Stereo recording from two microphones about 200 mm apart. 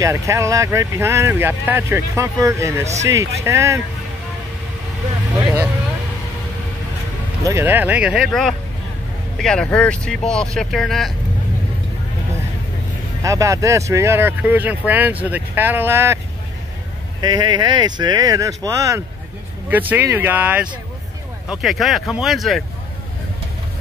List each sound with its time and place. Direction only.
0.0 s speech: 15° right (ahead or behind)
5.4 s speech: 10° right (ahead or behind)
7.4 s speech: 10° right (ahead or behind)
13.2 s speech: 15° right (ahead or behind)
17.2 s speech: 20° right (ahead or behind); by 22.6 s centre (ahead or behind)